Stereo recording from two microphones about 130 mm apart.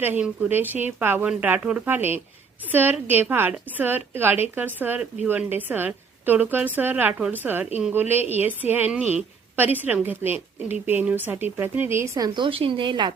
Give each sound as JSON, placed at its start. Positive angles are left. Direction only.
{"t": 0.0, "sound": "a woman's voice", "side_deg": -10}
{"t": 12.4, "sound": "speech", "side_deg": -45}